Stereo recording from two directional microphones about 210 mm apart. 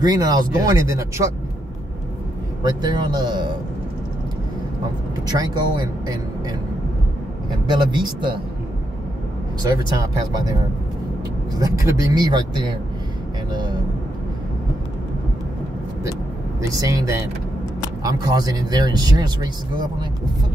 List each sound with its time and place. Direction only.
0.0 s speech: 20° right (ahead or behind)
2.6 s speech: 20° right (ahead or behind)
5.2 s speech: 20° right (ahead or behind)
7.7 s speech: 20° right (ahead or behind)
9.6 s speech: 20° right (ahead or behind)
11.5 s speech: 15° right (ahead or behind)
13.5 s vehicle: 20° right (ahead or behind)
16.6 s speech: 15° right (ahead or behind)